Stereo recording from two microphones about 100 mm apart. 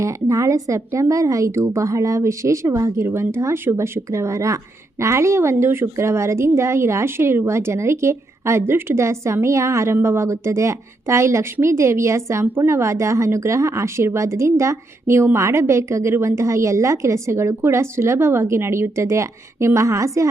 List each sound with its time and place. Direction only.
0.0 s speech: 30° right (ahead or behind)